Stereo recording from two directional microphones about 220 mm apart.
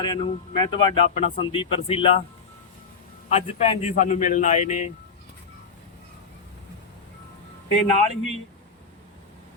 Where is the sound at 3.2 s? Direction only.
30° left (ahead or behind).